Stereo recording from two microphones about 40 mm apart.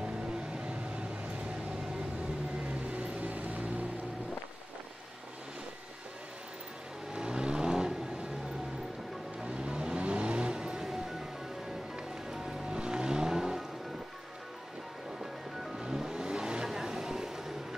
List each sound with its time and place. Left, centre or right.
0.3 s vehicle: right
2.9 s vehicle: right
7.2 s vehicle: right
9.4 s vehicle: right
10.9 s train: centre
12.3 s music: centre
15.8 s vehicle: centre